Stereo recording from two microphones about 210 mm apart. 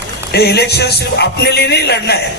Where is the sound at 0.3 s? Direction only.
50° left (ahead or behind).